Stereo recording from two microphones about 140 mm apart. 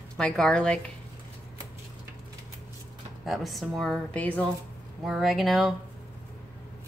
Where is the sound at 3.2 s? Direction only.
Centre (ahead or behind).